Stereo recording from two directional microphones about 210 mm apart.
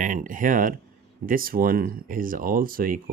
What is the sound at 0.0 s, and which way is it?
Speech, 40° right (ahead or behind).